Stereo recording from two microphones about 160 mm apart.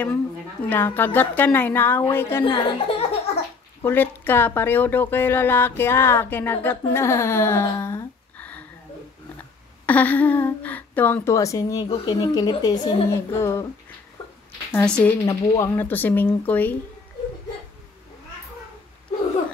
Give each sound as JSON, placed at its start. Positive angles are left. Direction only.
{"t": 0.7, "sound": "speech", "side_deg": 15}
{"t": 2.4, "sound": "speech", "side_deg": 35}
{"t": 3.8, "sound": "speech", "side_deg": 10}
{"t": 9.8, "sound": "a woman's voice", "side_deg": 10}
{"t": 14.7, "sound": "speech", "side_deg": 10}